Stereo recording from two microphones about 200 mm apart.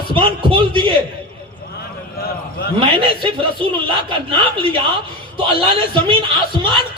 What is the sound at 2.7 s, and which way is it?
A man's voice, 25° right (ahead or behind).